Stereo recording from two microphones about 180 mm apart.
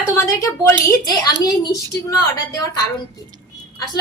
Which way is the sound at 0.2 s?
15° left (ahead or behind).